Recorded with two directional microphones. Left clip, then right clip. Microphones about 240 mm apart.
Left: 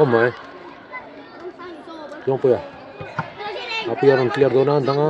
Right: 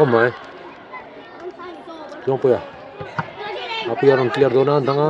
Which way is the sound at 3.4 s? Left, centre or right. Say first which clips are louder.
Left 2 dB; left.